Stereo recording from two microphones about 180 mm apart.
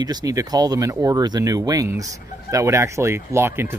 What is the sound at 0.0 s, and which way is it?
Speech, 20° right (ahead or behind).